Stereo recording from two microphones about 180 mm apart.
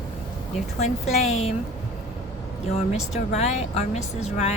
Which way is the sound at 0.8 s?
35° left (ahead or behind).